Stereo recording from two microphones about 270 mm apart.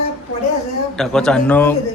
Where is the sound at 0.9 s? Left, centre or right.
Centre.